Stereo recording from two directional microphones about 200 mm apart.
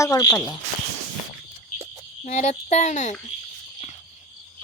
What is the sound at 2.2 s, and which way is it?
Speech, 35° left (ahead or behind).